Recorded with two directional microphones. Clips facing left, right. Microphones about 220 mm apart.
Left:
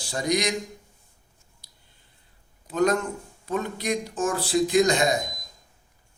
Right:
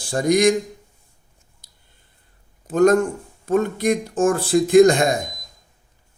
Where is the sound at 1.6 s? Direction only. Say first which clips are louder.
Right 1 dB; 50° right (ahead or behind).